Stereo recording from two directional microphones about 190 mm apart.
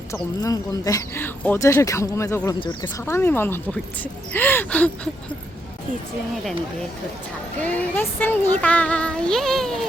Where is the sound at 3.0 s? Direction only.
10° left (ahead or behind).